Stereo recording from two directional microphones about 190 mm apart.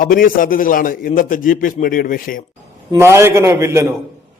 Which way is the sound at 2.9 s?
15° right (ahead or behind).